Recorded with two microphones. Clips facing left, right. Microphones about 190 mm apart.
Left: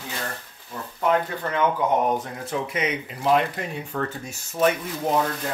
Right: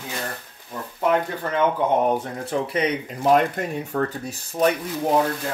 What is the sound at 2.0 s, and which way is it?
Speech, 30° right (ahead or behind).